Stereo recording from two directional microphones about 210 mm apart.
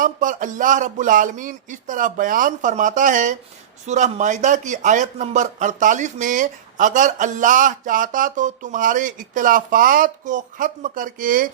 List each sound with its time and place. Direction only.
0.0 s speech: 35° right (ahead or behind)